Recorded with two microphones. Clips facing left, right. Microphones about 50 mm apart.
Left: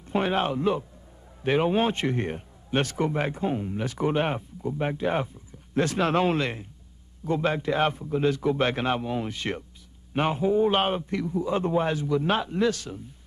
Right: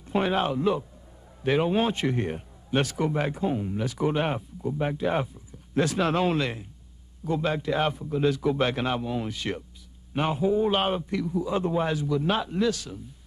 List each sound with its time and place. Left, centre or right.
0.1 s a man's voice: centre
9.3 s a man's voice: left
10.1 s a man's voice: centre